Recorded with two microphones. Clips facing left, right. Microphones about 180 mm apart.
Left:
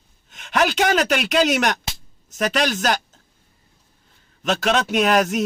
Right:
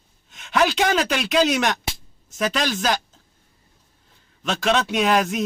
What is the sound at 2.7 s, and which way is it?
Speech, 45° left (ahead or behind).